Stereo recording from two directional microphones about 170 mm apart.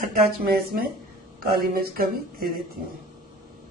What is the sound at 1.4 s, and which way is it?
Speech, 60° right (ahead or behind).